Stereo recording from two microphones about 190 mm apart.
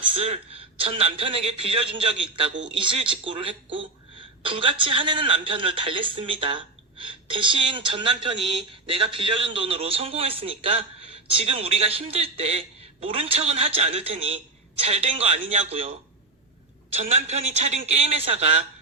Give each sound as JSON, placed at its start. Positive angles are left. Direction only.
{"t": 0.2, "sound": "a woman's voice", "side_deg": -30}
{"t": 16.9, "sound": "a man's voice", "side_deg": -35}